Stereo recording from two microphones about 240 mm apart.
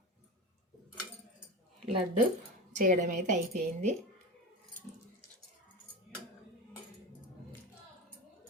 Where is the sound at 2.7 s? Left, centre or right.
Right.